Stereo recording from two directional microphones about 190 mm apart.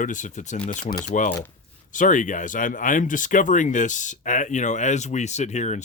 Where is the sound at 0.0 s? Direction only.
40° left (ahead or behind).